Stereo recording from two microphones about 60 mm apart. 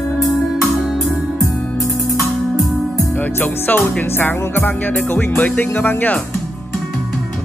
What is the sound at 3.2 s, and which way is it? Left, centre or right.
Music, left.